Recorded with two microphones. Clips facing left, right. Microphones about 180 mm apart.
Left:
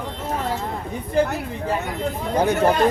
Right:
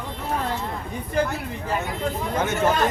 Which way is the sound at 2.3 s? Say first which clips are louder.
Left 5 dB; 35° left (ahead or behind).